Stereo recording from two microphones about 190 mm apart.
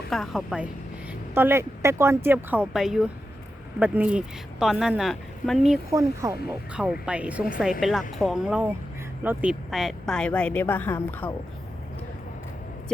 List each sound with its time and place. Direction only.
0.1 s a woman's voice: centre (ahead or behind)
5.9 s speech: 15° right (ahead or behind)
6.7 s a woman's voice: 5° right (ahead or behind); by 11.3 s 10° left (ahead or behind)